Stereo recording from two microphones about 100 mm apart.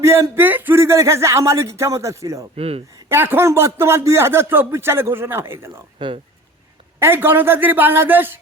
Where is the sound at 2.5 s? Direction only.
90° right.